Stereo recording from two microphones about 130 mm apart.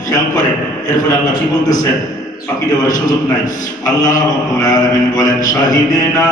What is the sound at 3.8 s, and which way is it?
Mantra, 30° left (ahead or behind).